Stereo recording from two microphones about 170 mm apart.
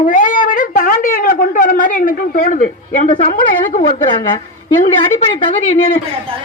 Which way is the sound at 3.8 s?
25° left (ahead or behind).